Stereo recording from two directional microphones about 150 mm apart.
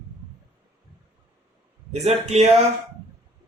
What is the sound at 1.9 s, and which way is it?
Speech, 45° right (ahead or behind).